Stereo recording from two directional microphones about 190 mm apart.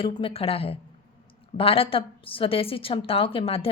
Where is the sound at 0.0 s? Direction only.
30° left (ahead or behind).